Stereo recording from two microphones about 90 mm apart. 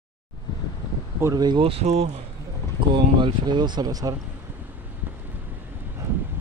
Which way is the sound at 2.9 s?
60° right (ahead or behind).